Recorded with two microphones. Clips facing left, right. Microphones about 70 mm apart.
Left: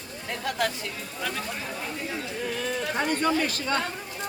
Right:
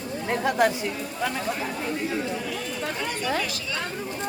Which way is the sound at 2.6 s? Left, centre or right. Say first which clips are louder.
Left 3 dB; left.